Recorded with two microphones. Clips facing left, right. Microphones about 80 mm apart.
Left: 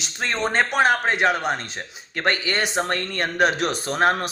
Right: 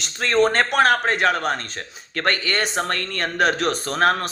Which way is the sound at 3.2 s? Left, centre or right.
Centre.